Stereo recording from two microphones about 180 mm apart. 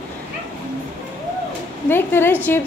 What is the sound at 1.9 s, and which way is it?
Speech, 10° left (ahead or behind).